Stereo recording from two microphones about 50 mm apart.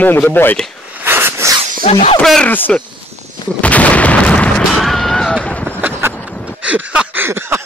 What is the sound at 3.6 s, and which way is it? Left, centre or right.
Gunshot, left.